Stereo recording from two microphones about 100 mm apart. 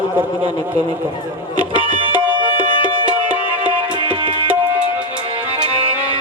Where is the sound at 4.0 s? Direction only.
60° right (ahead or behind).